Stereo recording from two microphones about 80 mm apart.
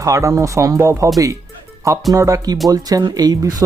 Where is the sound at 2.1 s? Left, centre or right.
Right.